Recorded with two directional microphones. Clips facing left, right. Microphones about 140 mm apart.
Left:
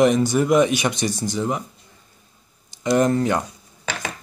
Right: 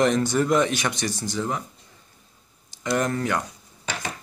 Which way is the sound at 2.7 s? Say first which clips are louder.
Left 6 dB; 20° left (ahead or behind).